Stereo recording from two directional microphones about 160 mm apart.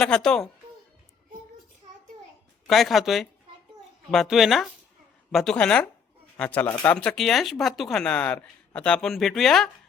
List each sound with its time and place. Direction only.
0.0 s speech: 5° left (ahead or behind)
2.6 s speech: centre (ahead or behind)